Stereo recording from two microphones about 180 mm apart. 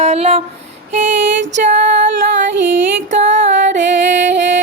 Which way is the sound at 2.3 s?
75° right (ahead or behind).